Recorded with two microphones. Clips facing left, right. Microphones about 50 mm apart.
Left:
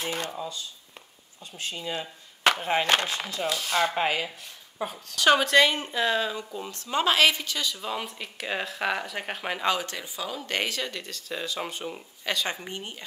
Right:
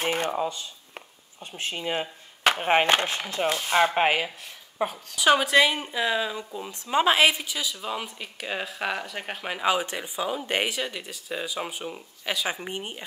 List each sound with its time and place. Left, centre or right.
0.0 s speech: right
2.9 s speech: right
4.9 s speech: centre
6.7 s speech: centre
9.7 s speech: centre